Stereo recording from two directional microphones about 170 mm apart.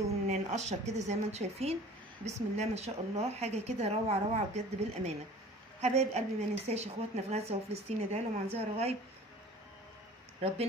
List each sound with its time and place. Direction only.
0.3 s a woman's voice: 40° right (ahead or behind)